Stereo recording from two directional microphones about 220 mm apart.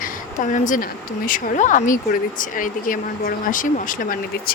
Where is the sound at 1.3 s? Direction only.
35° left (ahead or behind).